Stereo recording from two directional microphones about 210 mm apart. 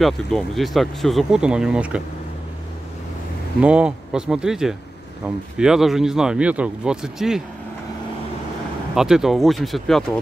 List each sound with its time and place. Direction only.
0.0 s speech: centre (ahead or behind)
3.6 s speech: 5° right (ahead or behind)
8.9 s speech: centre (ahead or behind)